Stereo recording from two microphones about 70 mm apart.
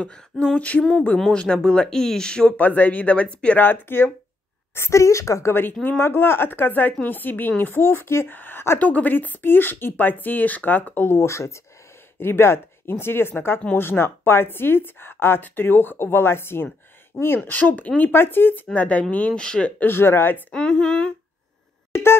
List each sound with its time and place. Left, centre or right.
0.0 s speech: centre
2.5 s a woman's voice: left
3.6 s a woman's voice: left
4.7 s a woman's voice: left
5.5 s a woman's voice: left
11.1 s a woman's voice: left
17.1 s speech: centre
17.5 s a woman's voice: left
18.7 s speech: centre
19.8 s a woman's voice: left
20.5 s speech: centre